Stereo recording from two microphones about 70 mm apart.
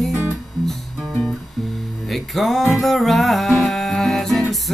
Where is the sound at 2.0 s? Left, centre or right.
Centre.